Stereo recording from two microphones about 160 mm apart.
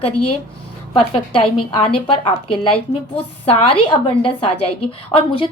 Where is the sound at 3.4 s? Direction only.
35° left (ahead or behind).